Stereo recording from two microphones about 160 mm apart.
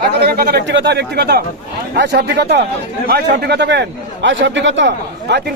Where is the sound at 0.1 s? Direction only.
80° right.